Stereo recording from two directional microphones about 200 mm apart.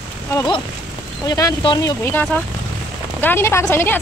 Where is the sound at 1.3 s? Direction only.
20° left (ahead or behind).